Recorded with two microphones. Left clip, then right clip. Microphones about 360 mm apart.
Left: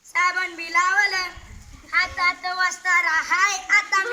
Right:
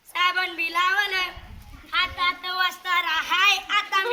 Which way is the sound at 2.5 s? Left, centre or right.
Centre.